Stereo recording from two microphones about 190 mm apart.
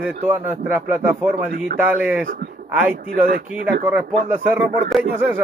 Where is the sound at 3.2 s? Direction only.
50° right (ahead or behind).